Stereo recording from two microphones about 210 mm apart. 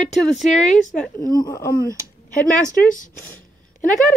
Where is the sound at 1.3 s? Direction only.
15° left (ahead or behind).